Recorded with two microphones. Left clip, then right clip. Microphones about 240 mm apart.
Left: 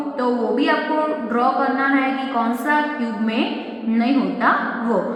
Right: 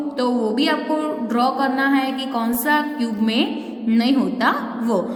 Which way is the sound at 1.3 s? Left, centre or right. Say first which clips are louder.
Right 1 dB; right.